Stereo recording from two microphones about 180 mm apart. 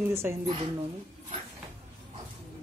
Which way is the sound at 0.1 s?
15° right (ahead or behind).